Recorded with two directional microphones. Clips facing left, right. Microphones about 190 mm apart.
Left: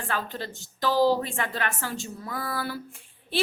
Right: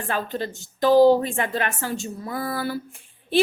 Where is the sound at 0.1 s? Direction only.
15° right (ahead or behind).